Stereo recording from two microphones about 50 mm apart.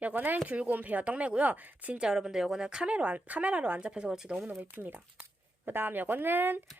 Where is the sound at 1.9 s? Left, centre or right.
Centre.